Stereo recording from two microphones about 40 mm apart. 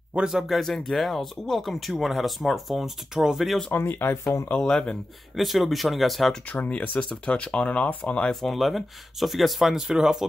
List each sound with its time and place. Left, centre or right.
0.2 s a man's voice: right
0.6 s speech: centre
3.2 s speech: centre
3.7 s speech: left
4.6 s speech: left
5.3 s speech: centre
6.7 s speech: left
7.0 s speech: left
8.4 s speech: centre
9.9 s speech: centre